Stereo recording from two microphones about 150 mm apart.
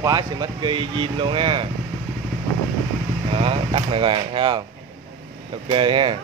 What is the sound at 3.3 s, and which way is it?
Speech, 35° right (ahead or behind).